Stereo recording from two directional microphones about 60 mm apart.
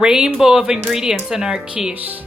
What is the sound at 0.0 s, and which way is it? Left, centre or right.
Speech, centre.